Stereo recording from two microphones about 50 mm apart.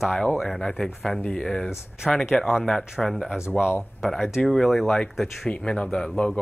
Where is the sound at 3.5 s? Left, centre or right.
Left.